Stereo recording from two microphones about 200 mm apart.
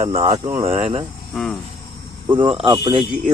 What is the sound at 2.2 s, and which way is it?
Speech, 25° right (ahead or behind).